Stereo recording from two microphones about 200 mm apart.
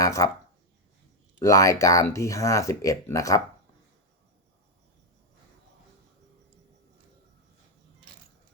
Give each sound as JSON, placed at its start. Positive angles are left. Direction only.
{"t": 0.0, "sound": "speech", "side_deg": 15}
{"t": 1.4, "sound": "speech", "side_deg": 15}